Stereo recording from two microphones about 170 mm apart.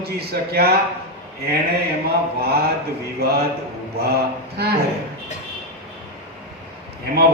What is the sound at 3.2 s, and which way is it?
Speech, 65° right (ahead or behind).